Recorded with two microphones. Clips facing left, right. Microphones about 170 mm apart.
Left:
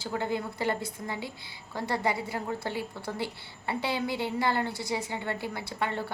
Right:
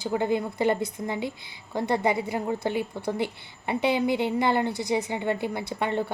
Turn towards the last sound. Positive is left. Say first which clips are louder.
# right 5 dB
turn(degrees=-20)  # may be behind; listen again after turning